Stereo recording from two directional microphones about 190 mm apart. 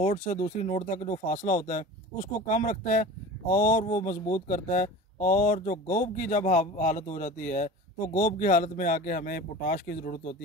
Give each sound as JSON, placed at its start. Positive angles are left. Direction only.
{"t": 0.0, "sound": "speech", "side_deg": 40}